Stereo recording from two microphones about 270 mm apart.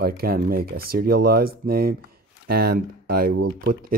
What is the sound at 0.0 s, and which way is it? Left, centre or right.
Speech, right.